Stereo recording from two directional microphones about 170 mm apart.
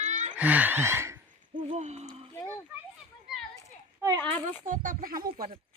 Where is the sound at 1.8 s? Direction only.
45° right (ahead or behind).